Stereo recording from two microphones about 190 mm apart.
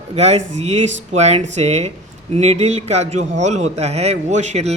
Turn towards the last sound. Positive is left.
turn(degrees=-35)  # may be behind; listen again after turning